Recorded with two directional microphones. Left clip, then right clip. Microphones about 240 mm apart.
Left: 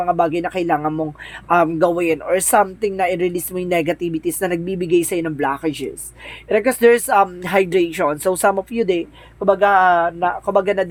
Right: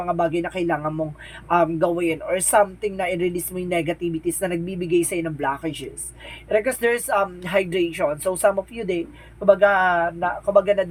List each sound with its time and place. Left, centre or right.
0.0 s a man's voice: left